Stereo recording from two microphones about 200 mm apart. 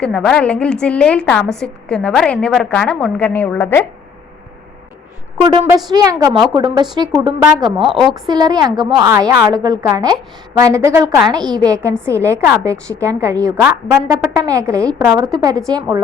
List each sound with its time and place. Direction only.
0.0 s a woman's voice: 5° left (ahead or behind)
5.4 s a woman's voice: 25° right (ahead or behind)